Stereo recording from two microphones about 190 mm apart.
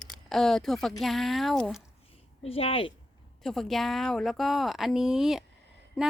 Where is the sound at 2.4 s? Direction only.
30° left (ahead or behind).